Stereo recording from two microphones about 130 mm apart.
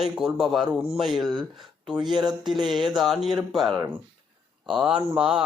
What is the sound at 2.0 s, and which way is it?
Speech, 35° right (ahead or behind).